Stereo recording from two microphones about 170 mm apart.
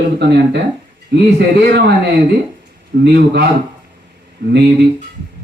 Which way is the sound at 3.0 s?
75° right (ahead or behind).